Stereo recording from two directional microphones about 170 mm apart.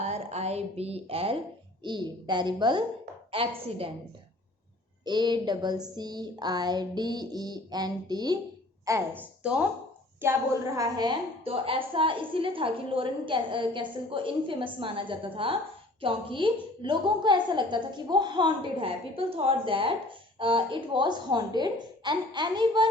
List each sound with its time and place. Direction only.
0.0 s a woman's voice: 40° right (ahead or behind)
5.0 s a woman's voice: 25° right (ahead or behind)